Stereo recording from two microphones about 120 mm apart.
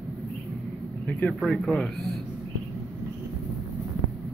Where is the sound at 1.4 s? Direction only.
5° left (ahead or behind).